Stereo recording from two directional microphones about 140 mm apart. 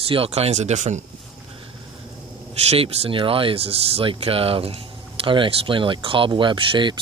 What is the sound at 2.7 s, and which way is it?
Speech, 45° right (ahead or behind).